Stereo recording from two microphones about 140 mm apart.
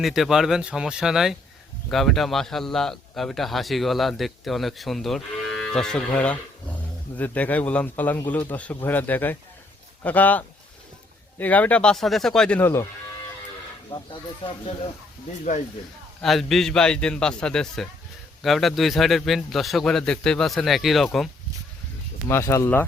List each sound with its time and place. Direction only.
0.0 s a man's voice: centre (ahead or behind); by 12.9 s 15° left (ahead or behind)
13.9 s speech: 35° left (ahead or behind)
16.2 s a man's voice: centre (ahead or behind)
22.3 s a man's voice: 20° left (ahead or behind)